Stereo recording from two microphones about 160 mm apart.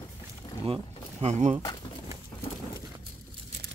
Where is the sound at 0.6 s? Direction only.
35° right (ahead or behind).